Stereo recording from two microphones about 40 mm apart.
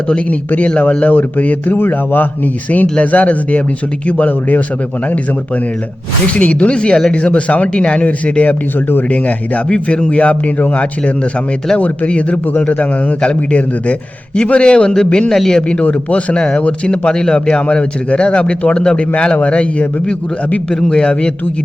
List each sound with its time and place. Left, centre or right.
0.1 s a man's voice: left
3.0 s a man's voice: left
6.3 s a man's voice: left
9.6 s a man's voice: left
15.8 s a man's voice: left
20.9 s a man's voice: left